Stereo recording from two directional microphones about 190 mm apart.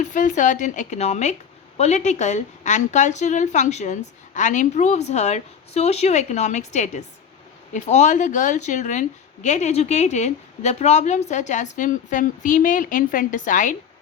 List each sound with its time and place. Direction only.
0.0 s a woman's voice: 40° left (ahead or behind)